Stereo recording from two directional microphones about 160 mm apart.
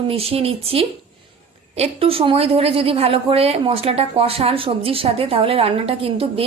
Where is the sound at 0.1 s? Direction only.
35° right (ahead or behind).